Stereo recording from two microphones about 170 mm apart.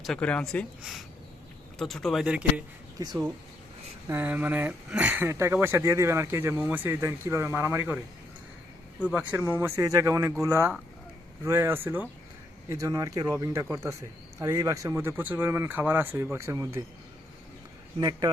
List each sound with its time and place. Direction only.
0.0 s speech: 5° left (ahead or behind)
3.0 s speech: 20° right (ahead or behind)
4.1 s speech: 10° right (ahead or behind)
9.1 s speech: 10° right (ahead or behind)